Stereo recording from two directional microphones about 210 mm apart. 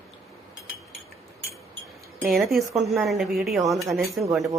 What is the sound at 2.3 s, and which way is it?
Speech, centre (ahead or behind).